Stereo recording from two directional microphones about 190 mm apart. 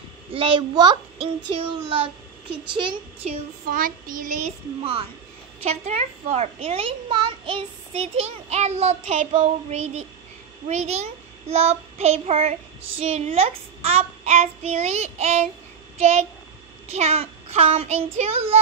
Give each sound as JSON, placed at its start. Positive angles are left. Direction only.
{"t": 0.3, "sound": "a child's voice", "side_deg": -30}
{"t": 3.7, "sound": "a child's voice", "side_deg": -45}